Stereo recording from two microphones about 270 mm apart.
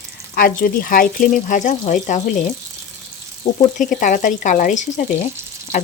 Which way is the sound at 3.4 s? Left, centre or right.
Left.